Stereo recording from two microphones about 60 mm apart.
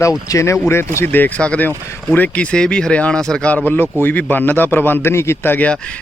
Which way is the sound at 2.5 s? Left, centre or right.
Centre.